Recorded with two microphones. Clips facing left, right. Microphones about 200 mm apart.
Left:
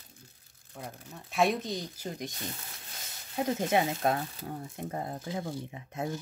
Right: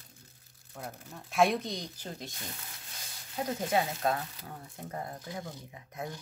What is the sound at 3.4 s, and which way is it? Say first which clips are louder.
Speech: left 3 dB; 20° left (ahead or behind).